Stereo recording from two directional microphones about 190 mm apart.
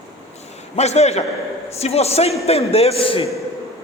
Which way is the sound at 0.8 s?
35° left (ahead or behind).